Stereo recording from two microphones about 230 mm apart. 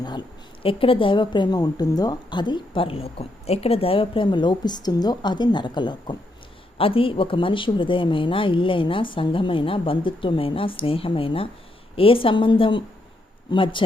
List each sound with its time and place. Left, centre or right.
0.0 s a woman's voice: centre